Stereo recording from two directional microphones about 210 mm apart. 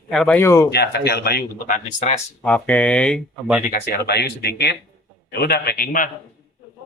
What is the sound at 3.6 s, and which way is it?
Speech, 45° left (ahead or behind).